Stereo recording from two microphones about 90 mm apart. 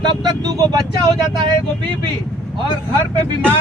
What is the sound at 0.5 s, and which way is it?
Speech, 50° right (ahead or behind).